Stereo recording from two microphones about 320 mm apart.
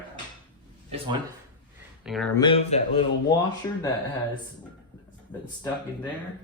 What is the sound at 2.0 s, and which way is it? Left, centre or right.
Speech, centre.